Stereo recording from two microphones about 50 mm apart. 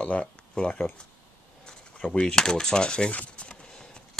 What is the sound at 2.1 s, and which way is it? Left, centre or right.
Speech, centre.